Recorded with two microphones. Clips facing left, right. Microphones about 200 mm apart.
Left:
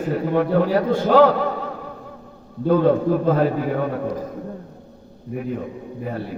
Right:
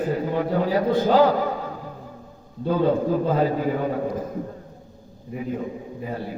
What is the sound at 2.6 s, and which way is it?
Speech, 60° left (ahead or behind).